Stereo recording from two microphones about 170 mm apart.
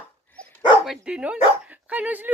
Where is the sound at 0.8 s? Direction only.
5° right (ahead or behind).